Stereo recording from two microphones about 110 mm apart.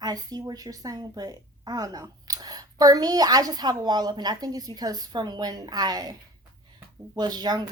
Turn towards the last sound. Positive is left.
turn(degrees=-40)  # may be behind; listen again after turning